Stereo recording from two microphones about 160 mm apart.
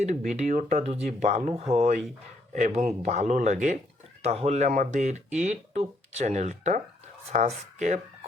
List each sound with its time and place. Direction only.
0.0 s speech: 45° right (ahead or behind)